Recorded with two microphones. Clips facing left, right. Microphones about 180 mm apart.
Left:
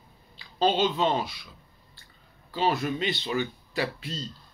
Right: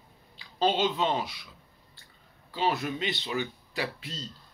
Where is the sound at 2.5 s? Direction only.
15° right (ahead or behind).